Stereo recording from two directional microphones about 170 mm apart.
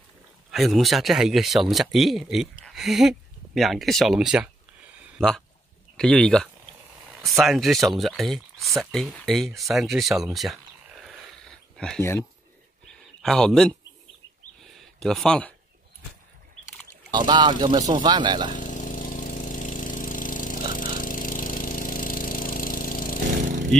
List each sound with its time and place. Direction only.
0.5 s speech: centre (ahead or behind)
13.2 s speech: 5° left (ahead or behind)
15.0 s speech: centre (ahead or behind)
17.1 s speech: 25° right (ahead or behind)
18.5 s lawn mower: 50° left (ahead or behind)
23.4 s vehicle: 50° right (ahead or behind)